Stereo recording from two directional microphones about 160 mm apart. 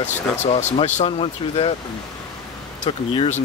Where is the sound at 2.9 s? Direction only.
35° left (ahead or behind).